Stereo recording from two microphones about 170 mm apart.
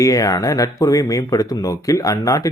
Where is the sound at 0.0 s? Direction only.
20° left (ahead or behind).